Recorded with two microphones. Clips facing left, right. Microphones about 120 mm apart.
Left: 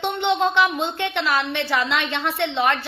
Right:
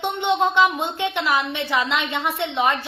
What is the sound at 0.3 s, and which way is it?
A woman's voice, 15° right (ahead or behind).